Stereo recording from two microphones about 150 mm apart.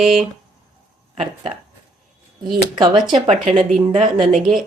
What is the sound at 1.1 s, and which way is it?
Speech, 45° right (ahead or behind).